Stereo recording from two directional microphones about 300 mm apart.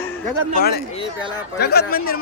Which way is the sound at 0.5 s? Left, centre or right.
Left.